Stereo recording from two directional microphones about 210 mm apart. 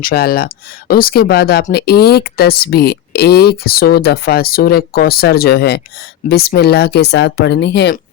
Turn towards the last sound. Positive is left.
turn(degrees=55)  # may be behind; listen again after turning